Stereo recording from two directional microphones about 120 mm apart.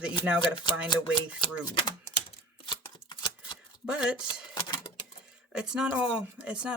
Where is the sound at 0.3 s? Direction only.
40° left (ahead or behind).